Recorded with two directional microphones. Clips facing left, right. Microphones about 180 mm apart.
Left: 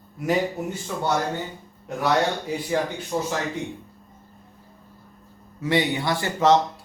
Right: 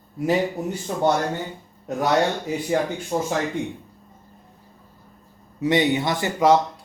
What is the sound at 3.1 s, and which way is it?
Speech, 45° right (ahead or behind).